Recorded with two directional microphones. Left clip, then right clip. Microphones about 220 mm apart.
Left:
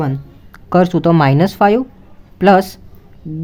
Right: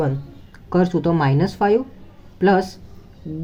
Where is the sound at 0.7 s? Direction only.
30° left (ahead or behind).